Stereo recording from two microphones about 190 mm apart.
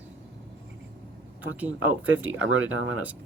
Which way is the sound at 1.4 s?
10° right (ahead or behind).